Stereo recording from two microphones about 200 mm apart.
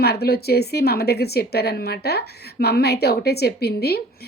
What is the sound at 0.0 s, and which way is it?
A woman's voice, 55° left (ahead or behind).